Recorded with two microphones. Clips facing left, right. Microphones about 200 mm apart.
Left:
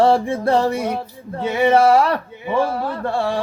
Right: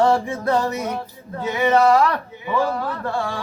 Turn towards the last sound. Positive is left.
turn(degrees=30)  # may be behind; listen again after turning